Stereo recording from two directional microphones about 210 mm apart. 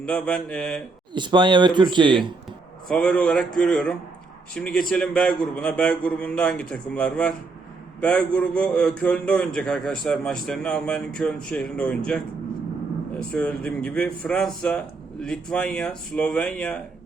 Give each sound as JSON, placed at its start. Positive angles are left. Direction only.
{"t": 0.0, "sound": "a man's voice", "side_deg": 5}
{"t": 1.1, "sound": "speech", "side_deg": -20}
{"t": 2.9, "sound": "a man's voice", "side_deg": 5}
{"t": 13.3, "sound": "a man's voice", "side_deg": 5}